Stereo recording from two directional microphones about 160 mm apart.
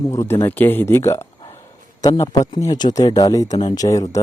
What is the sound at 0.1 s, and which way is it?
Speech, 15° left (ahead or behind).